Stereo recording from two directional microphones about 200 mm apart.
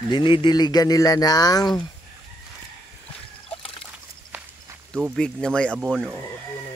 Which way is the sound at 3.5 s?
25° left (ahead or behind).